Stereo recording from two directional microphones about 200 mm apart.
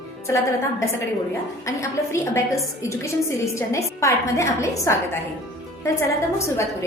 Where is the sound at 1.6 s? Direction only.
15° left (ahead or behind).